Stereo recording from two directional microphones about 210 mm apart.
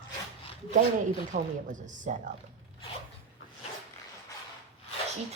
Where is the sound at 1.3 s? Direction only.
35° right (ahead or behind).